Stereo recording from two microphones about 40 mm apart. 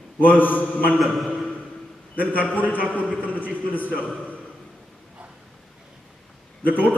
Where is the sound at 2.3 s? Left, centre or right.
Left.